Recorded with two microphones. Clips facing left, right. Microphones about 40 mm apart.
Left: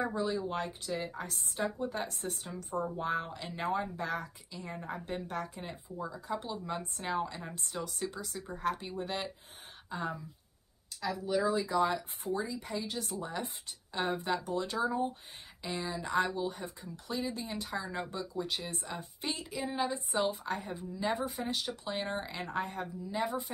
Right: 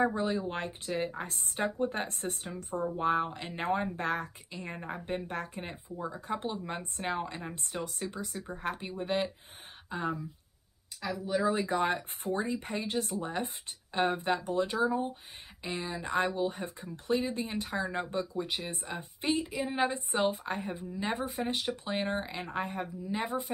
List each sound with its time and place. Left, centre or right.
0.0 s a woman's voice: right; by 11.4 s centre
11.5 s a woman's voice: right
14.8 s speech: centre
15.6 s speech: right
19.8 s a woman's voice: right; by 22.8 s centre
23.0 s speech: right